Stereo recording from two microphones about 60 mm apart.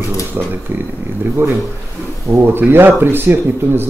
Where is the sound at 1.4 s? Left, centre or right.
Right.